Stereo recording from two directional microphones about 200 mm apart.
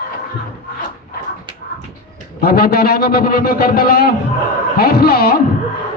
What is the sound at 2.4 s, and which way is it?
A man's voice, 50° left (ahead or behind).